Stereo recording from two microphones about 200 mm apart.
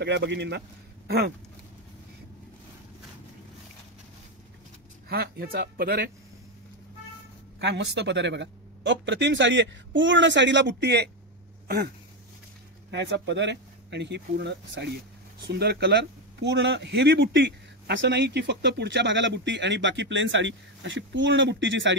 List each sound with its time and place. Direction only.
0.0 s speech: 60° right (ahead or behind)
5.0 s speech: 50° right (ahead or behind)
7.6 s speech: 60° right (ahead or behind)
11.6 s a sound: 50° right (ahead or behind)
12.9 s speech: 60° right (ahead or behind)